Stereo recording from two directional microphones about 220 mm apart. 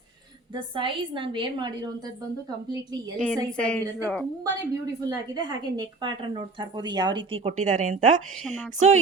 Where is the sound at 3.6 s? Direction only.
5° left (ahead or behind).